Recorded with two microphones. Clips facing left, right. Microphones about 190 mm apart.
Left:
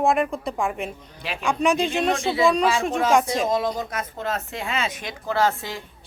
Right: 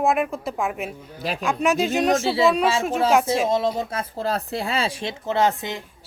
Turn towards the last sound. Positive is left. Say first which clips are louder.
# right 1 dB
turn(degrees=-20)  # may be behind; listen again after turning